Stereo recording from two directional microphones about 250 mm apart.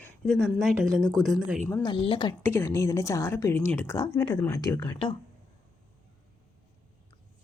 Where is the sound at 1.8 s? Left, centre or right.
Left.